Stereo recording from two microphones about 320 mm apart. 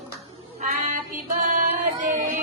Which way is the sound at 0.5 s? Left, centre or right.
Right.